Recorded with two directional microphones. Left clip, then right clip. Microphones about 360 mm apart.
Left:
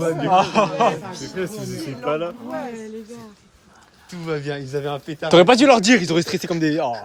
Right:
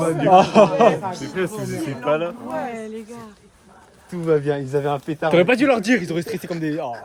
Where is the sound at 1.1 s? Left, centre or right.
Right.